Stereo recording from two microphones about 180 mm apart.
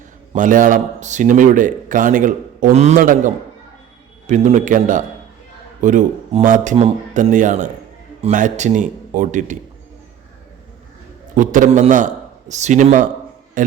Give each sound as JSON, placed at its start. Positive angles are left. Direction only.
{"t": 0.3, "sound": "a man's voice", "side_deg": -45}
{"t": 11.3, "sound": "a man's voice", "side_deg": -45}